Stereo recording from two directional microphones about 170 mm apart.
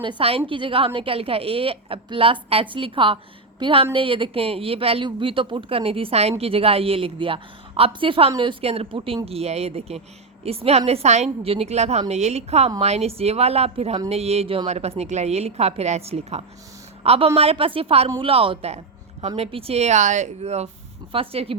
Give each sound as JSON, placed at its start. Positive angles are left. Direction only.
{"t": 0.0, "sound": "speech", "side_deg": -30}